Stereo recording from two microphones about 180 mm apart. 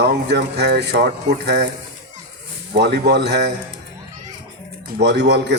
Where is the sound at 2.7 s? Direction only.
70° right (ahead or behind).